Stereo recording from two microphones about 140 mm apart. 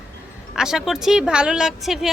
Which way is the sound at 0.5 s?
5° right (ahead or behind).